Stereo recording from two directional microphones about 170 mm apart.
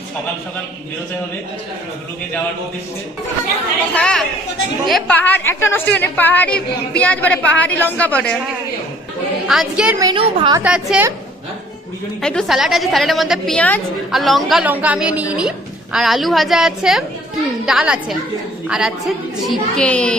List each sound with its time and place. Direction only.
3.9 s a woman's voice: 5° left (ahead or behind)
9.5 s a woman's voice: 5° right (ahead or behind)
10.0 s a woman's voice: 25° right (ahead or behind)
10.6 s a woman's voice: 5° right (ahead or behind)
12.2 s a woman's voice: 5° left (ahead or behind)
19.5 s a woman's voice: 5° left (ahead or behind)